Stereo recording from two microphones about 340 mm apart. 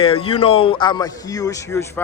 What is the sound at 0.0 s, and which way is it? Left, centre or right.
A man's voice, centre.